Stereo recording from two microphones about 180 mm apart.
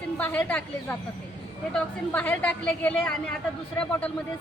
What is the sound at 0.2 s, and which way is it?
A woman's voice, 10° left (ahead or behind).